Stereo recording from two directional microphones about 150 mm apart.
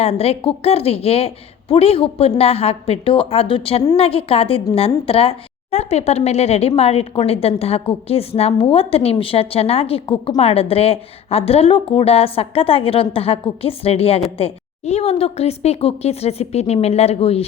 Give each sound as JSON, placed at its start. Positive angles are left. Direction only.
{"t": 0.0, "sound": "a woman's voice", "side_deg": 45}